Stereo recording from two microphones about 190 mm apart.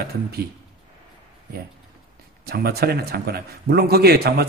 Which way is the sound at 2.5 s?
55° right (ahead or behind).